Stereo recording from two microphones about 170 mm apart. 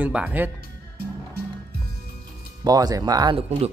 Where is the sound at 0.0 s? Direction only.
10° right (ahead or behind).